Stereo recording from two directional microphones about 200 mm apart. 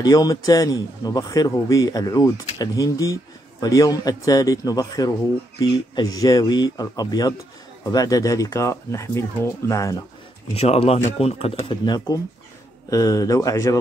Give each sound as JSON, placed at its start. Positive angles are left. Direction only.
{"t": 0.0, "sound": "a man's voice", "side_deg": 20}
{"t": 10.5, "sound": "a man's voice", "side_deg": 30}